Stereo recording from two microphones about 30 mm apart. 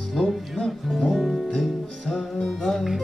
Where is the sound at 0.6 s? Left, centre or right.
Centre.